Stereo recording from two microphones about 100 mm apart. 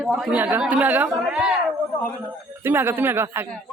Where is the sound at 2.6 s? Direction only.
25° right (ahead or behind).